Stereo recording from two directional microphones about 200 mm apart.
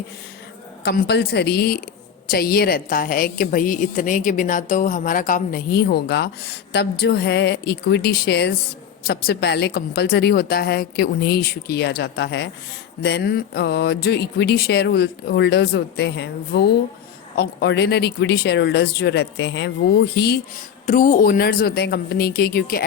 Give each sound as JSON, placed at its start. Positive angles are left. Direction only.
{"t": 0.9, "sound": "a woman's voice", "side_deg": 55}
{"t": 20.8, "sound": "a woman's voice", "side_deg": 40}